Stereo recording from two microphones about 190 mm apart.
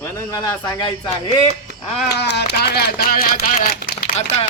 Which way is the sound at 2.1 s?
60° left (ahead or behind).